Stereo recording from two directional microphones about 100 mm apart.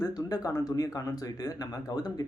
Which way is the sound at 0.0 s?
40° left (ahead or behind).